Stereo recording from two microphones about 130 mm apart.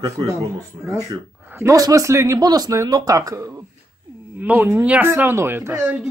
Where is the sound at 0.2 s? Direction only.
40° right (ahead or behind).